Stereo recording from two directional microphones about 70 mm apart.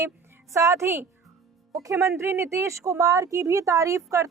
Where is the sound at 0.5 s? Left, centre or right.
Right.